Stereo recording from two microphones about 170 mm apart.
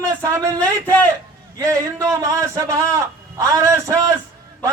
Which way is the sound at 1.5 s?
15° right (ahead or behind).